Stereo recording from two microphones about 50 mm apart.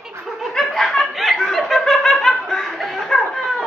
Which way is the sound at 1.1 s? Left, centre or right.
Centre.